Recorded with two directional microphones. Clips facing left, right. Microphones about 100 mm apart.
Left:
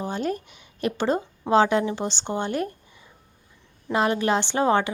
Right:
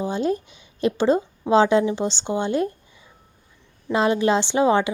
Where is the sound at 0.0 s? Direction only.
20° right (ahead or behind).